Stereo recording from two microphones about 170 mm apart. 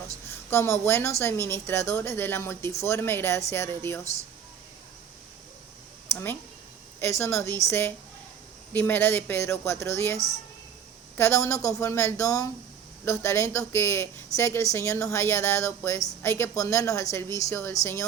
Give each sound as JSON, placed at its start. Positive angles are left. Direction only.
{"t": 0.3, "sound": "a woman's voice", "side_deg": 15}
{"t": 7.0, "sound": "a woman's voice", "side_deg": 15}
{"t": 11.2, "sound": "a woman's voice", "side_deg": 15}